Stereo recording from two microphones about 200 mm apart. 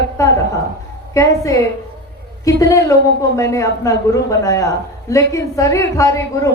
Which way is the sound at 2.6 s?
15° left (ahead or behind).